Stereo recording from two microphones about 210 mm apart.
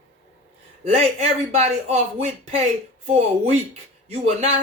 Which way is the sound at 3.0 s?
30° right (ahead or behind).